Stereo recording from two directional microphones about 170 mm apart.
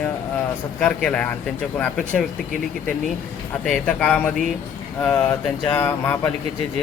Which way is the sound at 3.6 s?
5° left (ahead or behind).